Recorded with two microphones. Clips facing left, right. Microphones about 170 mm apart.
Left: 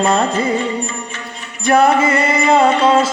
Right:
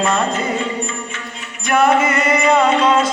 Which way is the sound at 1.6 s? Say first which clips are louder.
Left 2 dB; 35° left (ahead or behind).